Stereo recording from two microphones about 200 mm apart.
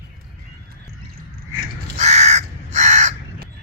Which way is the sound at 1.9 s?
35° right (ahead or behind).